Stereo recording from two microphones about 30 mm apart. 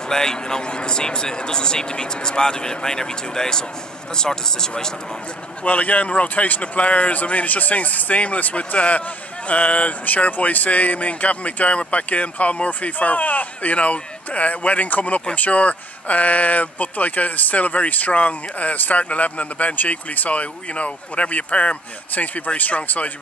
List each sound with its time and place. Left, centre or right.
0.1 s speech: left
5.7 s speech: left
6.6 s speech: left
7.4 s a man's voice: left
10.0 s speech: left